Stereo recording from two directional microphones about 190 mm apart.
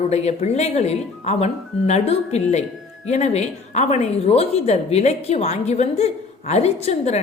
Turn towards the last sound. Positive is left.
turn(degrees=35)  # may be behind; listen again after turning